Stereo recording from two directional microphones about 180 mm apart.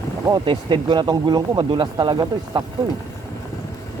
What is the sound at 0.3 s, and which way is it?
Speech, 25° right (ahead or behind).